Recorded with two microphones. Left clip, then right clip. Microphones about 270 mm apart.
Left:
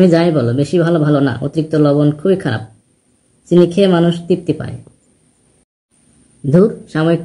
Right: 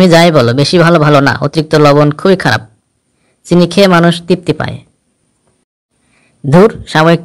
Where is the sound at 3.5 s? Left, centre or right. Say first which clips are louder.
Right 3 dB; right.